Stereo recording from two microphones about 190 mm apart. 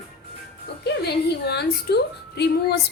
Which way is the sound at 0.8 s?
60° left (ahead or behind).